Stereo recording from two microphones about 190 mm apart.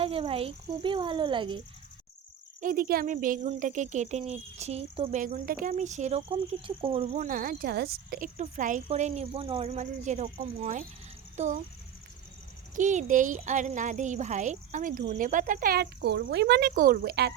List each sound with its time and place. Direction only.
0.0 s speech: 30° right (ahead or behind)
2.6 s speech: 50° right (ahead or behind)
12.7 s speech: 40° right (ahead or behind); by 17.3 s 60° right (ahead or behind)